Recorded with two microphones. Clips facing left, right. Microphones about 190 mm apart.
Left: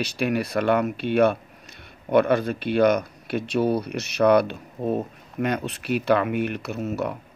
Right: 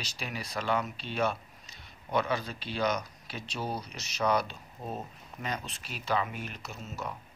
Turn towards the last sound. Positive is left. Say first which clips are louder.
# left 13 dB
turn(degrees=65)  # may be behind; listen again after turning